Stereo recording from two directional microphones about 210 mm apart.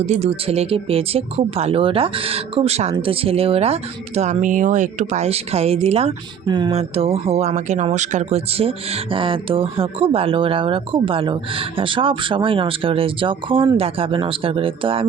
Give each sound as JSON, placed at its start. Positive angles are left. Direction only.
{"t": 0.0, "sound": "speech", "side_deg": -30}